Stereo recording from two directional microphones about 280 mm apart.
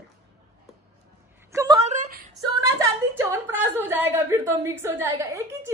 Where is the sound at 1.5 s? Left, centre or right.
Centre.